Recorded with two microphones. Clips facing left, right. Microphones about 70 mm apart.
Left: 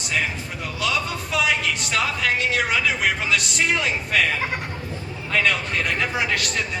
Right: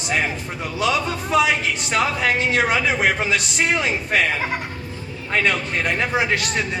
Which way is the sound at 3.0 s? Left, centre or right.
Right.